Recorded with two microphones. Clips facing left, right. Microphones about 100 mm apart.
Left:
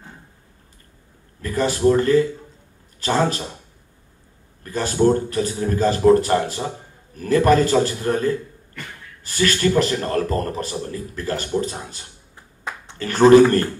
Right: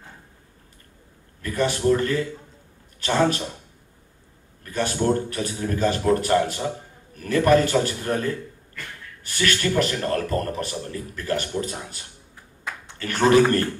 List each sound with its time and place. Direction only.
1.4 s a man's voice: 35° left (ahead or behind)
4.6 s a man's voice: 35° left (ahead or behind)